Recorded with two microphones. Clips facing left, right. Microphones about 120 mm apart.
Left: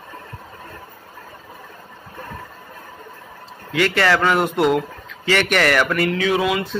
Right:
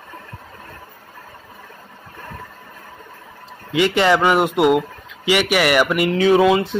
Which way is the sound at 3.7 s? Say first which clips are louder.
Right 2 dB; 20° right (ahead or behind).